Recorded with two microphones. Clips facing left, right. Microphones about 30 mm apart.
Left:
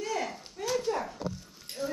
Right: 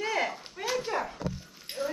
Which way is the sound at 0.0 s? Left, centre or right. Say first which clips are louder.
Right 3 dB; right.